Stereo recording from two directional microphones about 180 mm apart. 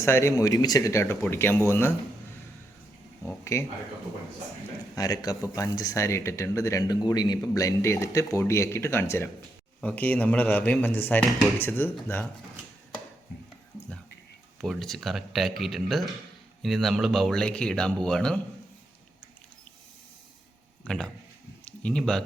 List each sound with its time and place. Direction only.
0.0 s speech: 15° left (ahead or behind)
3.2 s speech: 15° left (ahead or behind)
4.9 s speech: 20° left (ahead or behind)
14.6 s speech: centre (ahead or behind)
20.8 s speech: 5° left (ahead or behind)
21.6 s a sound: 5° left (ahead or behind)